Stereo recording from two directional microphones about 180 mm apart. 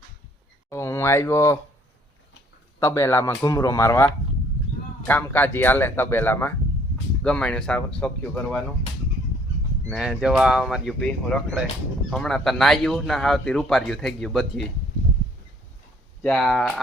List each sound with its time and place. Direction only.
0.7 s speech: 15° left (ahead or behind)
2.8 s a man's voice: 15° left (ahead or behind)
9.9 s a man's voice: centre (ahead or behind)
16.2 s a man's voice: 5° left (ahead or behind)